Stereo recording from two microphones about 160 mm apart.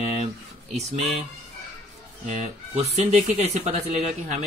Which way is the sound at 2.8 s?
45° right (ahead or behind).